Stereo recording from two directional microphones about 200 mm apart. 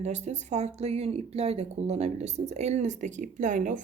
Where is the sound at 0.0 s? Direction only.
35° right (ahead or behind).